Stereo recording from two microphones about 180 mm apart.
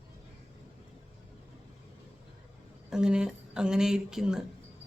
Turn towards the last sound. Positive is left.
turn(degrees=-5)  # may be behind; listen again after turning